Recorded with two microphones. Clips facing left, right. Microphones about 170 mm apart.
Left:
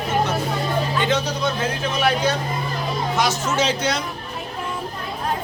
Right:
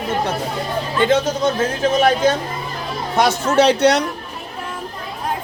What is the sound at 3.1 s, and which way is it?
Speech, 60° right (ahead or behind).